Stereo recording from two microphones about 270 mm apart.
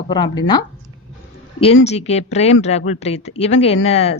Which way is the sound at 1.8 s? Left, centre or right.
Left.